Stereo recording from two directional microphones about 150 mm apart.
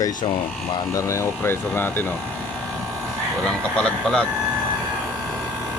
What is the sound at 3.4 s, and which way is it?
Speech, 5° left (ahead or behind).